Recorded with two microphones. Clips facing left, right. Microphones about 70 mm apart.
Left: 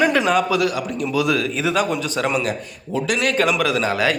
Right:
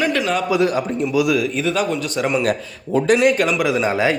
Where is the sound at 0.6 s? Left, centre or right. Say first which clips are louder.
Right 3 dB; right.